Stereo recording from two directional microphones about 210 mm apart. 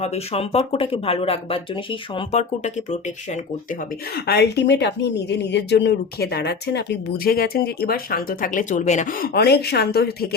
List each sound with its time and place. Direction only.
0.0 s speech: 30° left (ahead or behind)
4.1 s speech: 50° left (ahead or behind); by 9.3 s 35° left (ahead or behind)
9.3 s speech: 50° left (ahead or behind)